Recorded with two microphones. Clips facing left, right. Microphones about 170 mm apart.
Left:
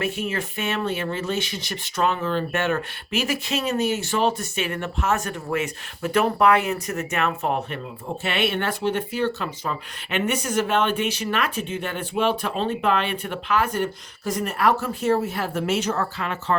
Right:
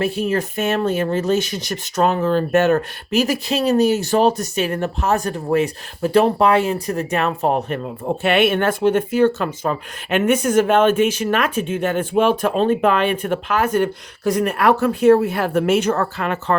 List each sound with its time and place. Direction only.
0.0 s speech: 35° right (ahead or behind); by 16.6 s 55° right (ahead or behind)